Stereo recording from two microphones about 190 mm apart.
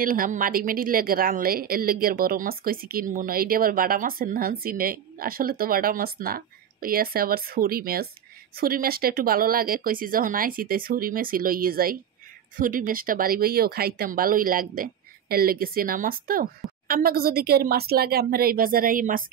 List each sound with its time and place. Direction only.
0.0 s a woman's voice: 45° right (ahead or behind)